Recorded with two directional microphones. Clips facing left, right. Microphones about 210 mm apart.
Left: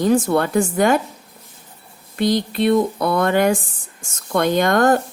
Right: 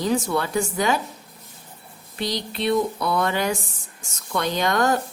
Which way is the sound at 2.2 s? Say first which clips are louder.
Left 9 dB; 50° left (ahead or behind).